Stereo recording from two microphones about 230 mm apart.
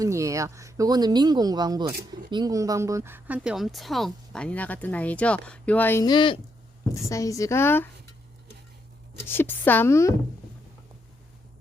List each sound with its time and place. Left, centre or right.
0.0 s a woman's voice: centre
9.2 s a woman's voice: centre